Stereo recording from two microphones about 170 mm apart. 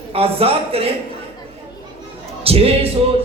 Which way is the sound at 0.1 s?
35° right (ahead or behind).